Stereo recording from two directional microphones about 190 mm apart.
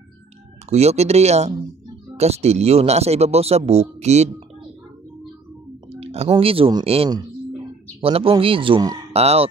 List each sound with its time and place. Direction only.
0.7 s speech: 35° right (ahead or behind)
5.9 s speech: 30° right (ahead or behind)